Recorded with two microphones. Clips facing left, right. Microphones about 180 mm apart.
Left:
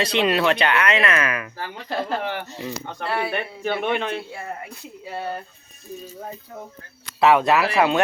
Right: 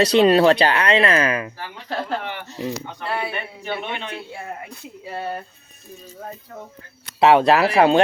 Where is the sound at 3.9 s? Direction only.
55° left (ahead or behind).